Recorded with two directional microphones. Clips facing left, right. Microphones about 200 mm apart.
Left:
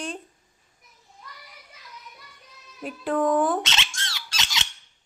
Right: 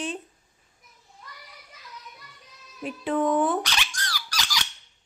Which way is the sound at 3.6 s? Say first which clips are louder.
Even; 25° left (ahead or behind).